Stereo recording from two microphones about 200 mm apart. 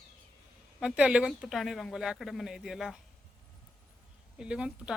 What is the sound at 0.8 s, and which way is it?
Speech, 5° right (ahead or behind).